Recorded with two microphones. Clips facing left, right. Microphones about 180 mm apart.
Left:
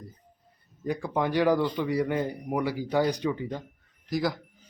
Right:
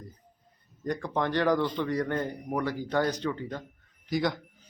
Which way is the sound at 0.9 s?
10° left (ahead or behind).